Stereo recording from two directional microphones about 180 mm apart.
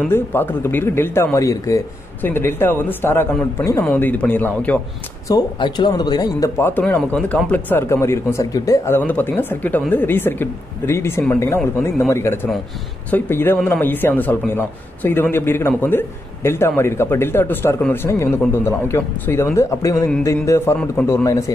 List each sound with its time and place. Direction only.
0.0 s a man's voice: 10° left (ahead or behind)
5.3 s a man's voice: 25° left (ahead or behind)